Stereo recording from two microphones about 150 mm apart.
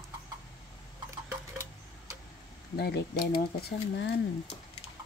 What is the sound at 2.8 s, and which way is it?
Speech, 90° left.